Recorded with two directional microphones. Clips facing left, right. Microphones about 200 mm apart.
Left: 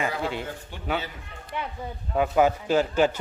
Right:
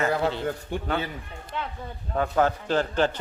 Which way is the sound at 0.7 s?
50° right (ahead or behind).